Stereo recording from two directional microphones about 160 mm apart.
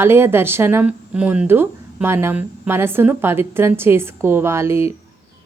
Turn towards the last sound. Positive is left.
turn(degrees=-15)  # may be behind; listen again after turning